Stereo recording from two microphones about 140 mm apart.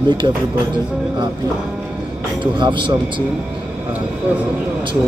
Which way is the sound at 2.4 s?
35° right (ahead or behind).